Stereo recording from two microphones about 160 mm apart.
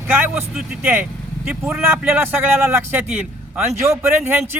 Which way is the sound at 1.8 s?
15° right (ahead or behind).